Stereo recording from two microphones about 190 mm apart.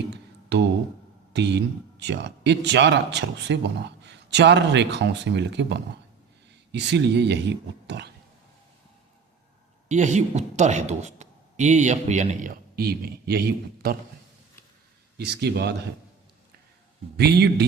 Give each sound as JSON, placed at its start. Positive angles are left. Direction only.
{"t": 0.1, "sound": "a sound", "side_deg": -65}
{"t": 1.3, "sound": "speech", "side_deg": -65}
{"t": 9.9, "sound": "speech", "side_deg": -40}
{"t": 15.2, "sound": "speech", "side_deg": -60}
{"t": 17.2, "sound": "speech", "side_deg": -60}